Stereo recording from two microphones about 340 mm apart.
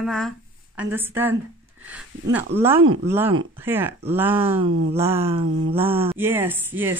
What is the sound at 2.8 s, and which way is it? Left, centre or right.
Speech, right.